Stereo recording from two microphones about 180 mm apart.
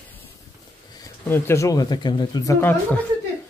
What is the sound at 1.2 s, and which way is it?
Speech, 15° left (ahead or behind).